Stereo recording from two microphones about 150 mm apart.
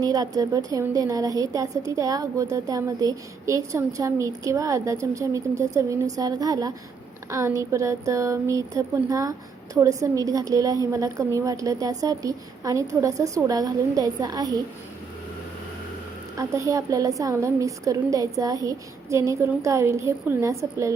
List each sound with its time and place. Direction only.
0.0 s a woman's voice: 25° right (ahead or behind)
16.4 s a woman's voice: 20° right (ahead or behind)